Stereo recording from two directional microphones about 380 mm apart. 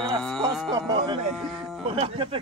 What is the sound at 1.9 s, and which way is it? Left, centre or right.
Speech, centre.